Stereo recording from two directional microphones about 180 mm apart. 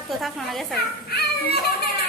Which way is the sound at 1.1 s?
60° left (ahead or behind).